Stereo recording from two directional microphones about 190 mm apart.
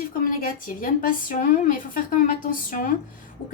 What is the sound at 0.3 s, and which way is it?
A woman's voice, 45° left (ahead or behind).